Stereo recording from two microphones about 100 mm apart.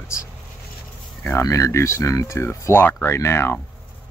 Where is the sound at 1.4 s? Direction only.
35° left (ahead or behind).